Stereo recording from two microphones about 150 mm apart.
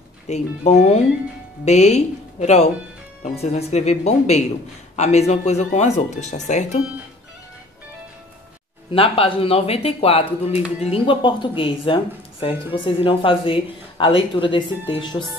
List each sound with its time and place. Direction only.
0.3 s speech: 50° left (ahead or behind)
8.9 s speech: 40° left (ahead or behind)